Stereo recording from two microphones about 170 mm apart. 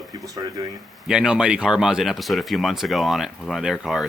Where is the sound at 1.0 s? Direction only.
5° right (ahead or behind).